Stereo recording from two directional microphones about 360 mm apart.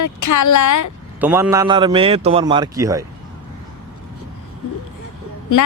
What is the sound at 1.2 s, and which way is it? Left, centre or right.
A man's voice, centre.